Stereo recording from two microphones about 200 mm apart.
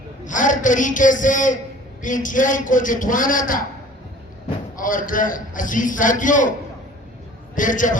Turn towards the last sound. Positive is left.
turn(degrees=40)  # may be behind; listen again after turning